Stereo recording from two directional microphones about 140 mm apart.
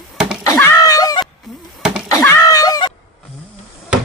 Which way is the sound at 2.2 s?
20° left (ahead or behind).